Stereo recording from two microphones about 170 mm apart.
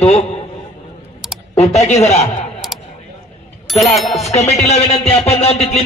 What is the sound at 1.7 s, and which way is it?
Speech, 40° left (ahead or behind).